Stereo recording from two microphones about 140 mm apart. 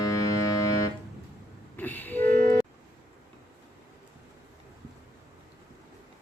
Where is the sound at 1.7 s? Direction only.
15° left (ahead or behind).